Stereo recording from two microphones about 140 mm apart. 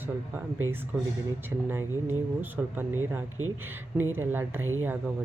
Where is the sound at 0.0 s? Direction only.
15° right (ahead or behind).